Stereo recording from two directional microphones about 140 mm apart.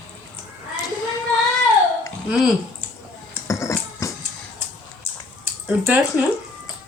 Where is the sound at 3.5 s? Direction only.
20° left (ahead or behind).